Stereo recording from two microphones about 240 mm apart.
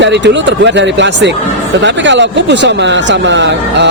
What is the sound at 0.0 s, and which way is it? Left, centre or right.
Speech, right.